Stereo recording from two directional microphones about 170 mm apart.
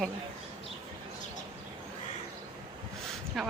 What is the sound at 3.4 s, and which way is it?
Speech, centre (ahead or behind).